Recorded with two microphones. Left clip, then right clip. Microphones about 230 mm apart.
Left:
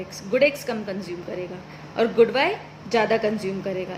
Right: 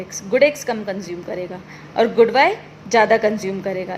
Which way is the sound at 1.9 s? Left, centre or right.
Centre.